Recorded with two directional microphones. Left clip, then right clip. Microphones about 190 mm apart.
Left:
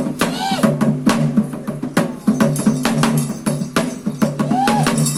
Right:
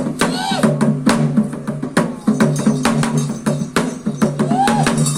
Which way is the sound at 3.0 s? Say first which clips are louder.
Left 1 dB; 20° right (ahead or behind).